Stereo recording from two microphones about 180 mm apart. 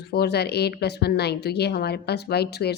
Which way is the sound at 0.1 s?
65° left (ahead or behind).